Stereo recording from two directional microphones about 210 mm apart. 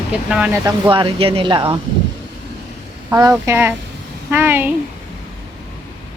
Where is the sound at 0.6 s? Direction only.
20° right (ahead or behind).